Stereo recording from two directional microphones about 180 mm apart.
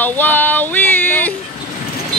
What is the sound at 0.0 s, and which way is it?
Female singing, 10° left (ahead or behind).